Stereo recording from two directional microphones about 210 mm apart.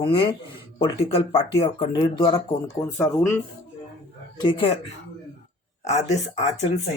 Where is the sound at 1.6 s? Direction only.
20° left (ahead or behind).